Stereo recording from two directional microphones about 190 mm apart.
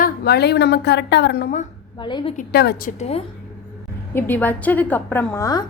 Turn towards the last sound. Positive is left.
turn(degrees=20)  # may be behind; listen again after turning